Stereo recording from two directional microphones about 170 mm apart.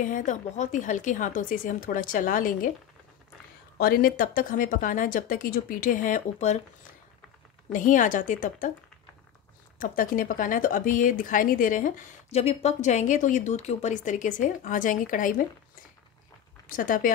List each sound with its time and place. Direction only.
0.0 s speech: 50° left (ahead or behind)
3.7 s speech: 60° left (ahead or behind)
7.7 s speech: 50° left (ahead or behind)
9.8 s speech: 55° left (ahead or behind)
16.6 s speech: 55° left (ahead or behind)